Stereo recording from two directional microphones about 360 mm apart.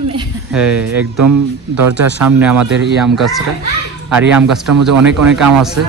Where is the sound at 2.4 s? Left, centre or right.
Centre.